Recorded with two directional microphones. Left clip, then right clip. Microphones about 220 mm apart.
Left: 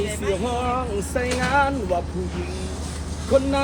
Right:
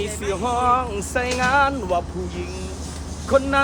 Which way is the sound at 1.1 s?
35° right (ahead or behind).